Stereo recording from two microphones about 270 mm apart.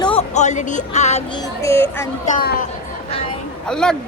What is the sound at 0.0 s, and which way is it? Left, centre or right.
Speech, left.